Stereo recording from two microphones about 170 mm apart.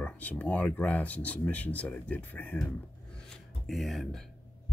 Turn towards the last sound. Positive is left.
turn(degrees=0)  # may be behind; listen again after turning